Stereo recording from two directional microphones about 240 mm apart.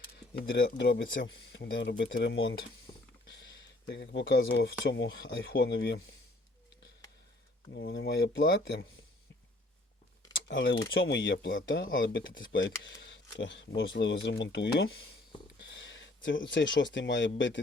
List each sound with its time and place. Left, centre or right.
0.5 s speech: left
7.7 s speech: left
10.3 s speech: left
12.1 s speech: left